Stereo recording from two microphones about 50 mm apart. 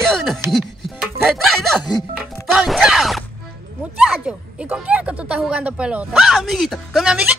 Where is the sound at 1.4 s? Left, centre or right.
Centre.